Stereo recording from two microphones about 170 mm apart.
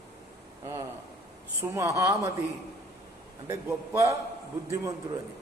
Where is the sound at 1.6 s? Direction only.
15° right (ahead or behind).